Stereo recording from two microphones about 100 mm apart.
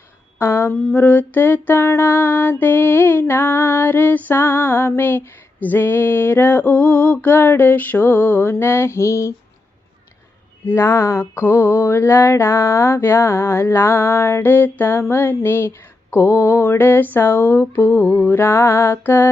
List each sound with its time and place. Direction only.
0.3 s a sound: 25° left (ahead or behind)
0.9 s mantra: 15° left (ahead or behind)
10.7 s mantra: 25° left (ahead or behind)